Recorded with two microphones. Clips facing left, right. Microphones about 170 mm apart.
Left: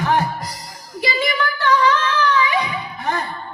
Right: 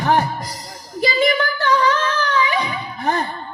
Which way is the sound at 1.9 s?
40° right (ahead or behind).